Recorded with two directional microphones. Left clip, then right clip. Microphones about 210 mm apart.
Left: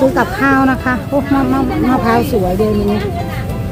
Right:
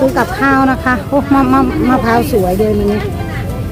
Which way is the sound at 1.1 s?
20° right (ahead or behind).